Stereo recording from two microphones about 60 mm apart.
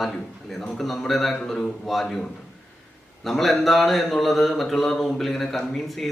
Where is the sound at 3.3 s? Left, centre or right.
Centre.